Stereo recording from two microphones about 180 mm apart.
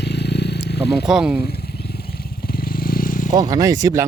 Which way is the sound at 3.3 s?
20° right (ahead or behind).